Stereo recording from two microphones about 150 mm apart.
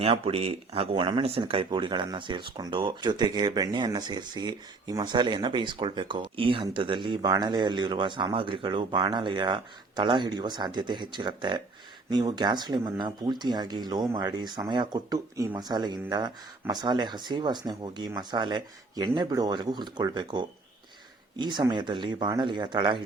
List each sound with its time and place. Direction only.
0.0 s speech: 40° right (ahead or behind)